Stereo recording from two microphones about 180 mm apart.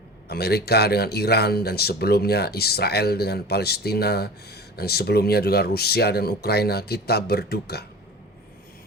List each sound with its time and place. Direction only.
0.3 s speech: 60° left (ahead or behind)